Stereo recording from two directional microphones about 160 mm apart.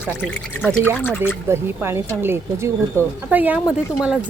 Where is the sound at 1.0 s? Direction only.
15° left (ahead or behind).